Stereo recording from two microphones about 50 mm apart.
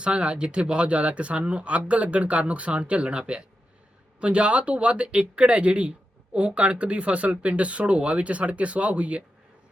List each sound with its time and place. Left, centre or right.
0.0 s speech: centre